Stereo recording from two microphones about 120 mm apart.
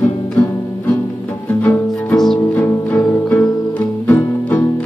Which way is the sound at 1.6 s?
15° left (ahead or behind).